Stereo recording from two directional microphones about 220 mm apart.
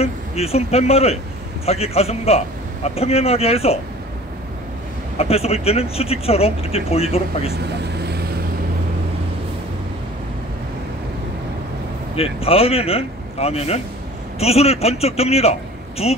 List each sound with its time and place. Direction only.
0.0 s speech: 30° left (ahead or behind)
5.1 s speech: 30° left (ahead or behind)
7.6 s vehicle: 50° right (ahead or behind)
12.2 s speech: 25° left (ahead or behind)